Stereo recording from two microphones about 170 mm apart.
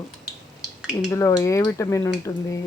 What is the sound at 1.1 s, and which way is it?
Speech, 20° left (ahead or behind).